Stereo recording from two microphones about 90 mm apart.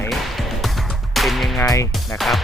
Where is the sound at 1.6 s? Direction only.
40° left (ahead or behind).